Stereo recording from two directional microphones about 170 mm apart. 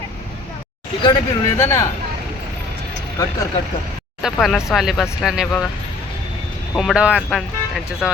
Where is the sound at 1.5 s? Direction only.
15° left (ahead or behind).